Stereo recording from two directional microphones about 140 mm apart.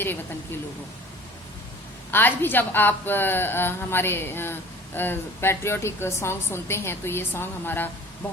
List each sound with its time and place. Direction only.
2.0 s a woman's voice: 15° left (ahead or behind)